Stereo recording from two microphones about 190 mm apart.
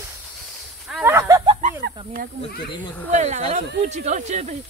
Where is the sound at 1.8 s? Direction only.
50° right (ahead or behind).